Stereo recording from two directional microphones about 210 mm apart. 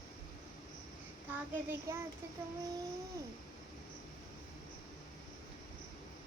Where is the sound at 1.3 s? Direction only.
10° right (ahead or behind).